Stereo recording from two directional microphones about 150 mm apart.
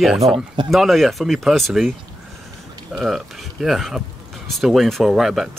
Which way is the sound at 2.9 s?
Centre (ahead or behind).